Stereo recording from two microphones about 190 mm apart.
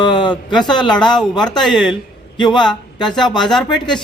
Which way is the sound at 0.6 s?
25° left (ahead or behind).